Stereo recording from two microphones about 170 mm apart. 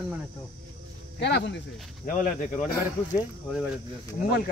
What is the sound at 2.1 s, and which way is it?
Speech, 50° left (ahead or behind).